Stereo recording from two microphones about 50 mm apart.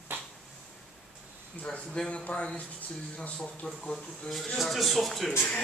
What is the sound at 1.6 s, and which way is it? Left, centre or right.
A man's voice, centre.